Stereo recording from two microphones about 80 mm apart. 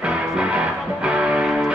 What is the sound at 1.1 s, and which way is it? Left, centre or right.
Music, centre.